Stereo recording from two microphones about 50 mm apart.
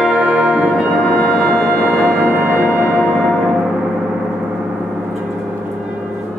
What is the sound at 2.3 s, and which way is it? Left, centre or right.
Music, right.